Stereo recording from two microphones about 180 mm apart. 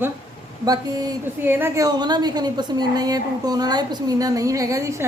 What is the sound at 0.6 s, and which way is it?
A woman's voice, 20° right (ahead or behind).